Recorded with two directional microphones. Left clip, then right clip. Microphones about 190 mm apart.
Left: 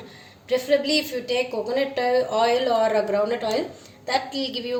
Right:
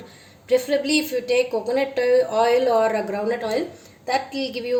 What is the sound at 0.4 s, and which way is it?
A woman's voice, 35° right (ahead or behind).